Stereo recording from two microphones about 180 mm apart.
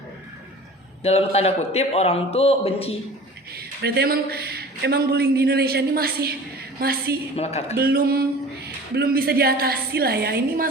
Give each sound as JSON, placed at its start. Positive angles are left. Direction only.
{"t": 1.0, "sound": "a man's voice", "side_deg": 35}
{"t": 3.8, "sound": "a man's voice", "side_deg": -65}
{"t": 7.3, "sound": "a man's voice", "side_deg": 35}
{"t": 7.8, "sound": "a man's voice", "side_deg": -60}